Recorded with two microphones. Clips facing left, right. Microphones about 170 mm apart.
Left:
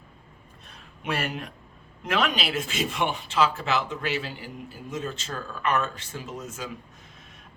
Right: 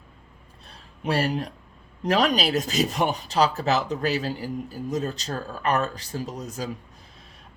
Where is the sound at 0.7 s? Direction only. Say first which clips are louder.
Right 5 dB; 35° right (ahead or behind).